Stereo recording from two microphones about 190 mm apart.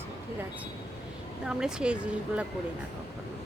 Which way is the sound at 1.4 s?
5° right (ahead or behind).